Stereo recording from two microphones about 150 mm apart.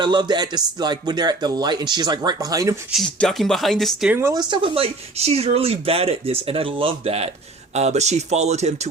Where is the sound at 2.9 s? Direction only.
Centre (ahead or behind).